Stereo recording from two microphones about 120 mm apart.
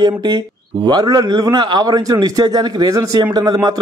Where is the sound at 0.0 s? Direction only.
40° right (ahead or behind).